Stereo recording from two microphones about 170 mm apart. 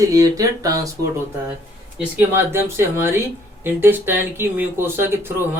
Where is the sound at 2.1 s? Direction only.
15° right (ahead or behind).